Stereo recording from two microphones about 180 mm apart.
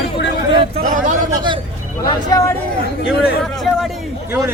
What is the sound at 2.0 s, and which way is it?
Speech, 20° left (ahead or behind).